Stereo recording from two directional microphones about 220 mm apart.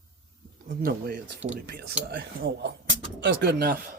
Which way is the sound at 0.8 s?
40° right (ahead or behind).